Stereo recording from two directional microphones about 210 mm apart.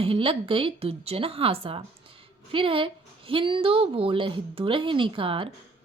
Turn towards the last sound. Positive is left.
turn(degrees=-25)  # may be behind; listen again after turning